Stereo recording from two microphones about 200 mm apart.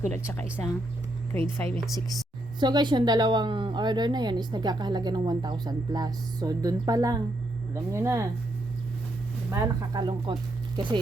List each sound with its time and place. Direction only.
1.3 s speech: 10° left (ahead or behind)
2.6 s a woman's voice: 20° right (ahead or behind)
9.5 s a woman's voice: 15° right (ahead or behind)